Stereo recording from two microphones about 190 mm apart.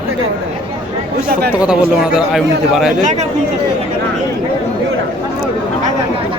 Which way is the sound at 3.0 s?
40° right (ahead or behind).